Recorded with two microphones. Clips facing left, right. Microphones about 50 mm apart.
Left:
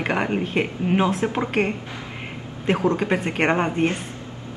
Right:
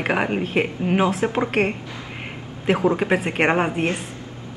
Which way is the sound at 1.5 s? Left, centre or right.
Centre.